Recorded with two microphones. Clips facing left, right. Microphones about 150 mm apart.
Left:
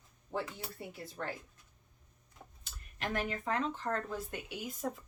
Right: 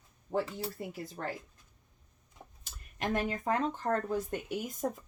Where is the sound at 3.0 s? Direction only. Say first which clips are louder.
Right 4 dB; 40° right (ahead or behind).